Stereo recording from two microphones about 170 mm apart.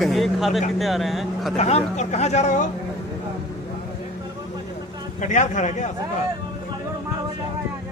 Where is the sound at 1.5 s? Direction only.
40° left (ahead or behind).